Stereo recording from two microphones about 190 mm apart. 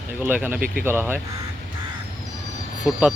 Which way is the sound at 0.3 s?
10° right (ahead or behind).